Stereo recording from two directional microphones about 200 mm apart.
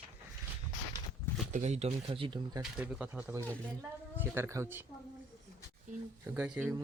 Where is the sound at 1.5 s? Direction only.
35° right (ahead or behind).